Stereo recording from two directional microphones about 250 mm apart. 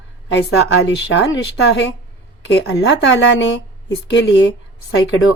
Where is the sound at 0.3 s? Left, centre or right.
Left.